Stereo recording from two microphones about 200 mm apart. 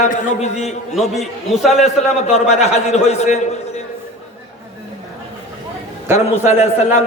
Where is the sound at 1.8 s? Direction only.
35° left (ahead or behind).